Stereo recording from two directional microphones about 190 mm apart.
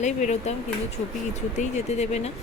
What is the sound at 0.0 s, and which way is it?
Speech, 40° left (ahead or behind).